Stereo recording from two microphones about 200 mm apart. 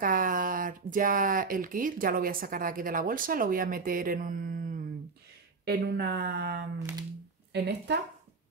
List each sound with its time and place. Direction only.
0.0 s speech: 45° right (ahead or behind)
5.7 s speech: 55° right (ahead or behind)